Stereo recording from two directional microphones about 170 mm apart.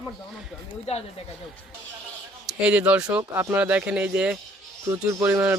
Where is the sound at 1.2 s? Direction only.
40° left (ahead or behind).